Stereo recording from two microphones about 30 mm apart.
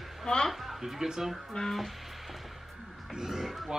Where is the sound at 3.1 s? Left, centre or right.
Centre.